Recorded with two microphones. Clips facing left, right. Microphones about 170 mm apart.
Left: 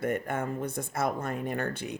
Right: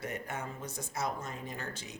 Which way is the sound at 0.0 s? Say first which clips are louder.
Left 9 dB; 55° left (ahead or behind).